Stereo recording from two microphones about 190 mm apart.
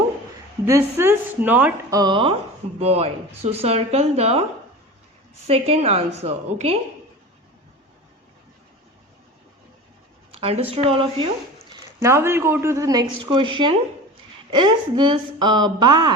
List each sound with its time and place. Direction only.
0.6 s a woman's voice: 10° right (ahead or behind)
2.0 s speech: 25° right (ahead or behind)
5.5 s speech: 30° right (ahead or behind)
10.4 s speech: 30° right (ahead or behind)
11.9 s a woman's voice: 15° right (ahead or behind)